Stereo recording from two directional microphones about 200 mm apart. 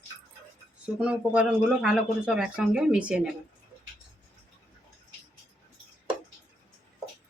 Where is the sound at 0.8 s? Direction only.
5° right (ahead or behind).